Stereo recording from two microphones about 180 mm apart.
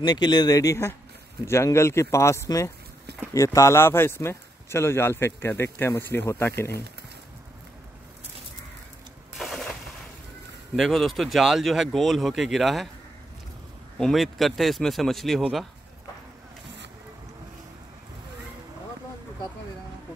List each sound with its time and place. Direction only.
0.0 s speech: 25° left (ahead or behind)
9.4 s gunshot: centre (ahead or behind)
10.8 s speech: centre (ahead or behind)
13.9 s speech: centre (ahead or behind)